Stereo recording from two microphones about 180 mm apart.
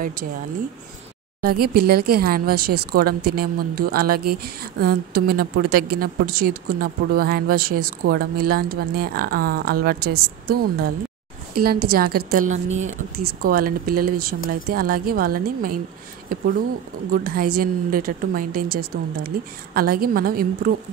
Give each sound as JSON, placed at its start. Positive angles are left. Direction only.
{"t": 0.0, "sound": "a woman's voice", "side_deg": -50}
{"t": 1.4, "sound": "a woman's voice", "side_deg": -55}
{"t": 17.1, "sound": "a woman's voice", "side_deg": -55}